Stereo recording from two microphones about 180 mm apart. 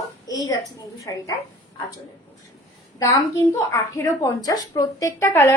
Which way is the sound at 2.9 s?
20° left (ahead or behind).